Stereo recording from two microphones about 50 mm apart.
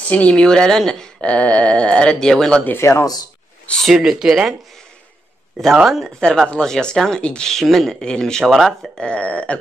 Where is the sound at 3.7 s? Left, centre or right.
Centre.